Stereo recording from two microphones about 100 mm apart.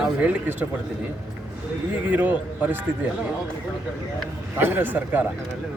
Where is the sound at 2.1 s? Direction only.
15° right (ahead or behind).